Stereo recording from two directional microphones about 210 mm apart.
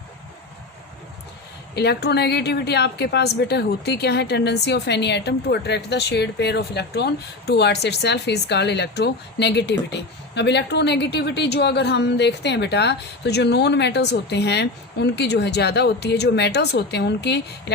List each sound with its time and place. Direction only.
1.7 s a woman's voice: 50° left (ahead or behind)